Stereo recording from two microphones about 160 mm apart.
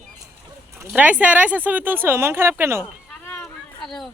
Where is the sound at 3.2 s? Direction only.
10° left (ahead or behind).